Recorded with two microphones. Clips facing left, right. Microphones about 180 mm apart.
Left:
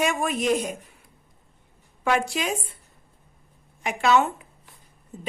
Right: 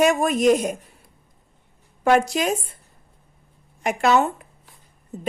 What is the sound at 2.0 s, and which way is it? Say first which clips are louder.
Speech: right 6 dB; 45° right (ahead or behind).